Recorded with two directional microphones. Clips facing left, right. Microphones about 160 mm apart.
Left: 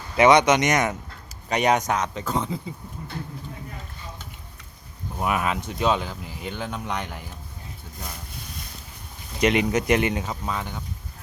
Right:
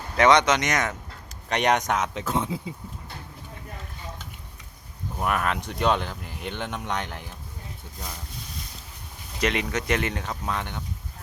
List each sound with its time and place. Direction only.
0.2 s speech: 10° left (ahead or behind)
1.5 s speech: 5° left (ahead or behind)
5.2 s speech: 5° left (ahead or behind)
9.4 s speech: 10° left (ahead or behind)